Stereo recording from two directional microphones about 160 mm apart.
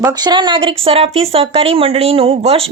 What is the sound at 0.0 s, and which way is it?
Speech, 25° right (ahead or behind).